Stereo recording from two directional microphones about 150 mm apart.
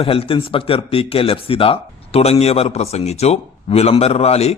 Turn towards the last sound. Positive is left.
turn(degrees=45)  # may be behind; listen again after turning